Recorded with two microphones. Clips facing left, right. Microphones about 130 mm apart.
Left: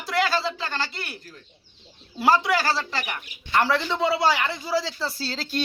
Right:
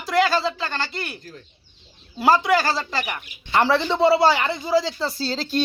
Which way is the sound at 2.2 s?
Centre (ahead or behind).